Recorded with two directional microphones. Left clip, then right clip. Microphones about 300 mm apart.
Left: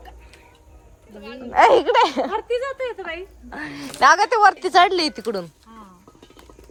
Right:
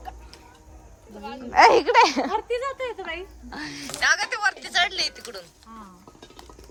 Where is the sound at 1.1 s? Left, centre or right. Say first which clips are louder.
Right 1 dB; right.